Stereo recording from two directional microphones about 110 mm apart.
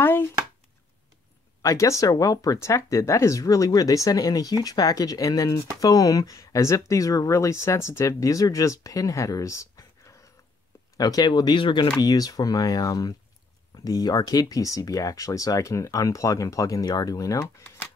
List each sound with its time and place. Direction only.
0.0 s speech: 20° left (ahead or behind)
1.6 s speech: 30° left (ahead or behind); by 11.9 s 50° left (ahead or behind)
12.0 s speech: 35° left (ahead or behind)